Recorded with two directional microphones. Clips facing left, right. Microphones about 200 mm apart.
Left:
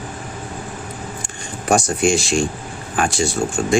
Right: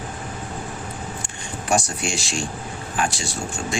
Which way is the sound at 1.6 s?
50° left (ahead or behind).